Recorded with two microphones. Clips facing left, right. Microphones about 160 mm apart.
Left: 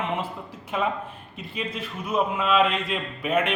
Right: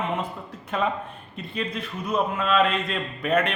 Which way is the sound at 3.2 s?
10° left (ahead or behind).